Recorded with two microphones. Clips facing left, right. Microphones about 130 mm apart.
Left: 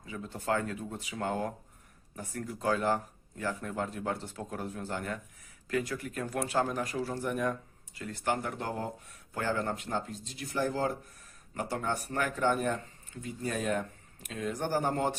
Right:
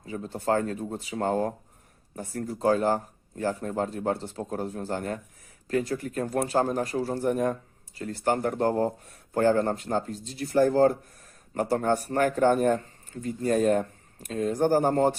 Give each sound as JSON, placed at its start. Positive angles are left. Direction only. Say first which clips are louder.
{"t": 0.0, "sound": "a man's voice", "louder": "right 7 dB", "side_deg": -35}